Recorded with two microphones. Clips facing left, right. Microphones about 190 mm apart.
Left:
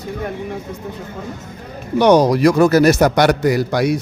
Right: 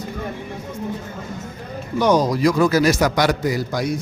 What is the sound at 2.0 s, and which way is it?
A man's voice, 70° left (ahead or behind).